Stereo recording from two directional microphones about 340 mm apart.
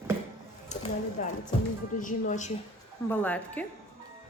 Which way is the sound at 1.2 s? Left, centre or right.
Left.